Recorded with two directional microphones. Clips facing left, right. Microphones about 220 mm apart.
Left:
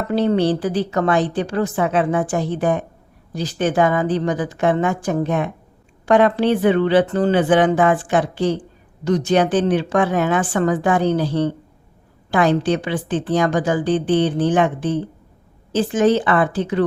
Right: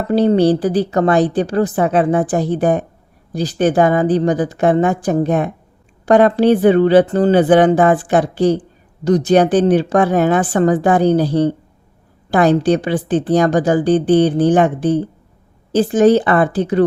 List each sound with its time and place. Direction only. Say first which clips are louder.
0.1 s a woman's voice: right 5 dB; 35° right (ahead or behind)